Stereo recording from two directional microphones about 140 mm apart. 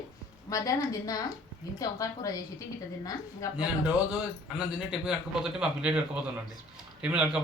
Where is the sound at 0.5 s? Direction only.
25° left (ahead or behind).